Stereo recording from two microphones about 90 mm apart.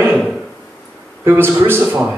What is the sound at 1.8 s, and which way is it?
Speech, 10° right (ahead or behind).